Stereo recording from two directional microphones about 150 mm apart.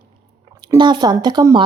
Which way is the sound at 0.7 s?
30° right (ahead or behind).